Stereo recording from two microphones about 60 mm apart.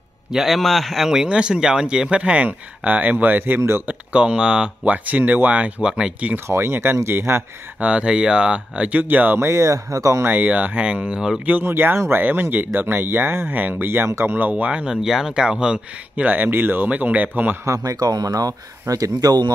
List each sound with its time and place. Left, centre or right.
0.3 s speech: centre; by 3.6 s right
3.8 s speech: right
4.8 s speech: right
6.3 s speech: right
7.8 s speech: centre
9.4 s speech: right
10.2 s speech: right
11.6 s speech: right
14.2 s speech: right
15.0 s speech: centre
16.3 s speech: right
17.8 s speech: right